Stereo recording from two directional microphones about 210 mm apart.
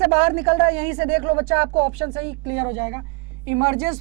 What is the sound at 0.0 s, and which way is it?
Speech, 10° right (ahead or behind).